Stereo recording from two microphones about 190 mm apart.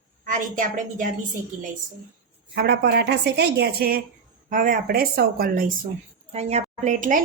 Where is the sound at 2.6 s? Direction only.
60° right (ahead or behind).